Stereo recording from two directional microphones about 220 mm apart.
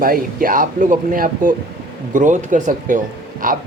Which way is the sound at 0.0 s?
40° right (ahead or behind).